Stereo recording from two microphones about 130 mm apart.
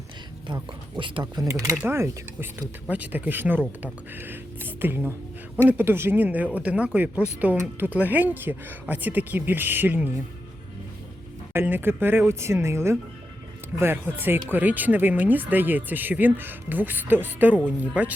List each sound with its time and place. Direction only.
0.4 s speech: 35° right (ahead or behind); by 10.1 s 15° right (ahead or behind)
11.5 s speech: 15° right (ahead or behind)